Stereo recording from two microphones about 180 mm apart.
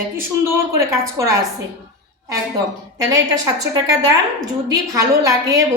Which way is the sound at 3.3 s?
20° right (ahead or behind).